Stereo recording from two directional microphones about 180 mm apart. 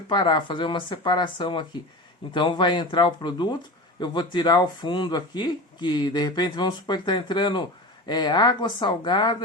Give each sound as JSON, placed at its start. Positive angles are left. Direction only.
{"t": 0.1, "sound": "speech", "side_deg": 25}